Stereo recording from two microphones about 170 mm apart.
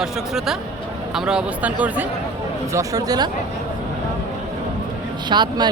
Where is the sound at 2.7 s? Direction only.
20° right (ahead or behind).